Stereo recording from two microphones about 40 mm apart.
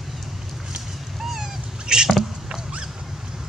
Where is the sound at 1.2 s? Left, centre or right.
Centre.